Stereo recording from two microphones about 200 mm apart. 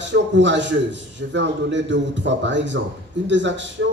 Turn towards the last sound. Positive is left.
turn(degrees=-65)  # may be behind; listen again after turning